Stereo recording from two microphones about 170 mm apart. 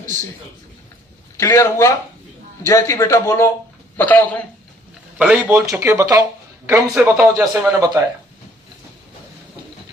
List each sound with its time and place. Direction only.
1.4 s a man's voice: 15° left (ahead or behind)
5.1 s speech: 5° right (ahead or behind)
7.8 s speech: 20° right (ahead or behind)